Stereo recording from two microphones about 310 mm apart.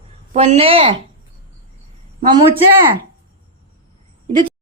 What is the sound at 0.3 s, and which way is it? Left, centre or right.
Speech, centre.